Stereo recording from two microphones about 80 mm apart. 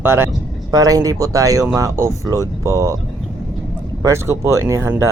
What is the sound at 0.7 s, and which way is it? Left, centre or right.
Speech, right.